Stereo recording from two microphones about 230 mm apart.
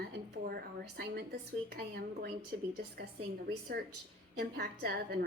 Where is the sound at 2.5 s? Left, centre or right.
Right.